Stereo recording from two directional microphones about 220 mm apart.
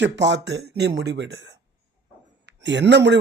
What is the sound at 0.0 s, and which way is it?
Speech, 55° right (ahead or behind).